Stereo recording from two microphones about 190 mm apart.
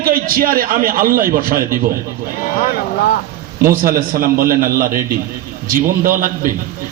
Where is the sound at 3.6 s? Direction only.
50° right (ahead or behind).